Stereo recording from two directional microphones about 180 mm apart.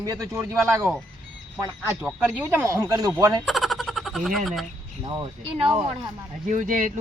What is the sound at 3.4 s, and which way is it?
Speech, centre (ahead or behind).